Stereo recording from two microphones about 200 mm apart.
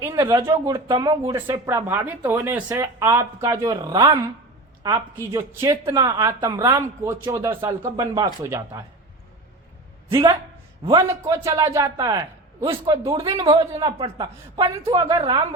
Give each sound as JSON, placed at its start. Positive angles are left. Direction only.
{"t": 0.0, "sound": "speech", "side_deg": -15}
{"t": 10.8, "sound": "speech", "side_deg": -20}